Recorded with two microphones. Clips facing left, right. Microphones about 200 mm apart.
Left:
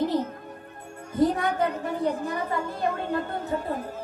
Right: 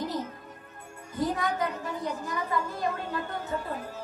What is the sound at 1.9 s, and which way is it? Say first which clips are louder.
Speech: left 6 dB; 60° left (ahead or behind).